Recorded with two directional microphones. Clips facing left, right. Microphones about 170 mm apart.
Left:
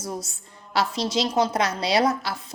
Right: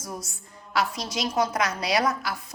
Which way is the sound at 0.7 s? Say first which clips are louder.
Left 3 dB; 30° left (ahead or behind).